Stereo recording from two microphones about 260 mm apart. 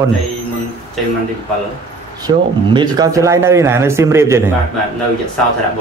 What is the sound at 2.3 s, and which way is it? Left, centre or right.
A man's voice, centre.